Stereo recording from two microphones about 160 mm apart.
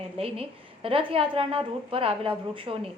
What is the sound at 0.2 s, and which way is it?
A woman's voice, 35° right (ahead or behind).